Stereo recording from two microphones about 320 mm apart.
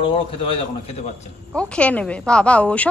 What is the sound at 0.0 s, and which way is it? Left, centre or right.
Speech, centre.